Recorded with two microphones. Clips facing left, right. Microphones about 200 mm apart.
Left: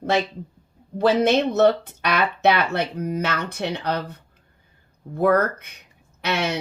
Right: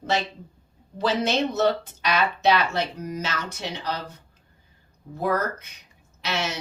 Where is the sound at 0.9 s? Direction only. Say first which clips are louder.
Left 6 dB; 55° left (ahead or behind).